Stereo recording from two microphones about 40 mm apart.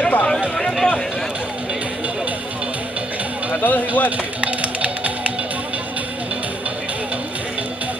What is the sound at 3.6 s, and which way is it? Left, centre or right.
Speech, left.